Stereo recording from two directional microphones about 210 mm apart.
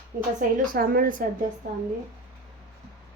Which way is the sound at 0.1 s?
45° right (ahead or behind).